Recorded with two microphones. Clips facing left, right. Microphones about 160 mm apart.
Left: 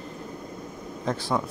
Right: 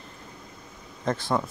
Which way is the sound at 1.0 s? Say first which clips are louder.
Right 1 dB; centre (ahead or behind).